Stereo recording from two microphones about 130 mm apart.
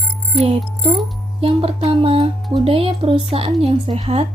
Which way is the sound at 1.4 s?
45° right (ahead or behind).